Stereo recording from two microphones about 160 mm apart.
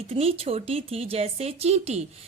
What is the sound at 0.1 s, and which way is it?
A woman's voice, 35° right (ahead or behind).